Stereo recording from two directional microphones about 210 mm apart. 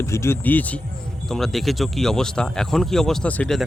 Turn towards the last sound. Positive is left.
turn(degrees=5)  # may be behind; listen again after turning